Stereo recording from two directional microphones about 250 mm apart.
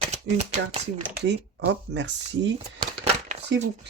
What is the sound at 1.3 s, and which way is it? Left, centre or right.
Speech, right.